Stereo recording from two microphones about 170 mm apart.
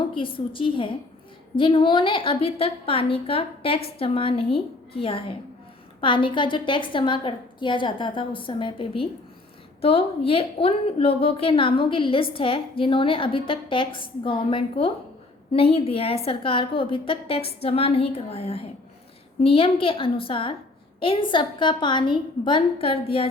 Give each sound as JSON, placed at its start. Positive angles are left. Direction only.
{"t": 0.0, "sound": "a woman's voice", "side_deg": 30}